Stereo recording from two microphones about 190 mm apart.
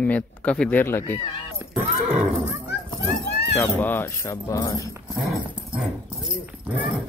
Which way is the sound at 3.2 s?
60° left (ahead or behind).